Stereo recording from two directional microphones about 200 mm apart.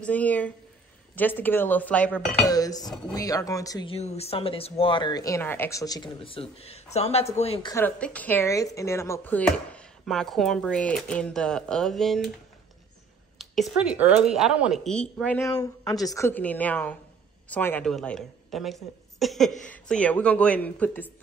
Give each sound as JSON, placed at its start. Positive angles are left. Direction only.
{"t": 0.0, "sound": "speech", "side_deg": 5}
{"t": 3.9, "sound": "speech", "side_deg": 30}
{"t": 7.7, "sound": "speech", "side_deg": 10}
{"t": 13.4, "sound": "speech", "side_deg": -5}